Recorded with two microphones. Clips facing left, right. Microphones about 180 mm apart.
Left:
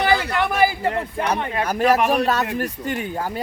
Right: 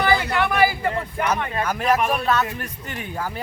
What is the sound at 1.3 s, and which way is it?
Speech, 35° left (ahead or behind).